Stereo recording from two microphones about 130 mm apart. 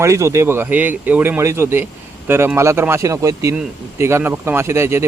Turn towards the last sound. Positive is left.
turn(degrees=-20)  # may be behind; listen again after turning